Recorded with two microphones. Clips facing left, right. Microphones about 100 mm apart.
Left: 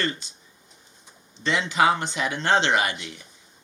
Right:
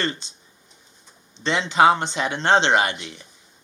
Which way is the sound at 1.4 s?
25° right (ahead or behind).